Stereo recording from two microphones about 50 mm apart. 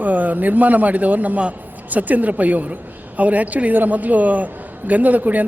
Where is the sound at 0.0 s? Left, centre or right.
Right.